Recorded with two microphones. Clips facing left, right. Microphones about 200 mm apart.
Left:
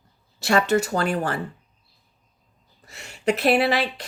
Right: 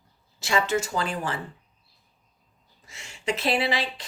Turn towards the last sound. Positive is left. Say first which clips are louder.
# left 5 dB
turn(degrees=65)  # may be behind; listen again after turning